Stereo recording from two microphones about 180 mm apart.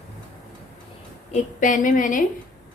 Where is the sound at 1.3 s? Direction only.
45° left (ahead or behind).